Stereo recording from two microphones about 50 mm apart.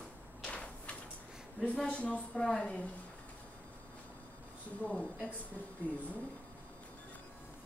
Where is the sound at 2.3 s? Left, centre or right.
Centre.